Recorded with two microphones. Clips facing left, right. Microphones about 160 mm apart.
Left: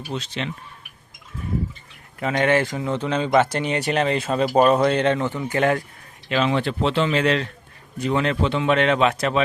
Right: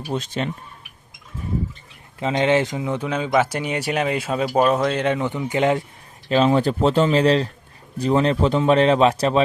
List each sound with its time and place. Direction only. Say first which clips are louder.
0.1 s speech: right 4 dB; 50° right (ahead or behind)
2.1 s speech: right 1 dB; 20° right (ahead or behind)
6.2 s speech: right 4 dB; 35° right (ahead or behind)